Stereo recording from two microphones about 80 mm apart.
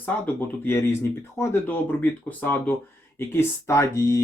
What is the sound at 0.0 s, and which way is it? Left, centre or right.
Speech, left.